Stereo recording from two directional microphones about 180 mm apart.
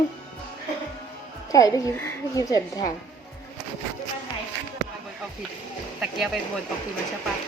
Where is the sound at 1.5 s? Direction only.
20° left (ahead or behind).